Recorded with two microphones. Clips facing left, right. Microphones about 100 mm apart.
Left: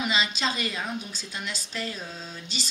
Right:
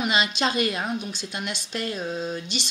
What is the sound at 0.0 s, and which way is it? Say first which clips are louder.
Speech: right 3 dB; 50° right (ahead or behind).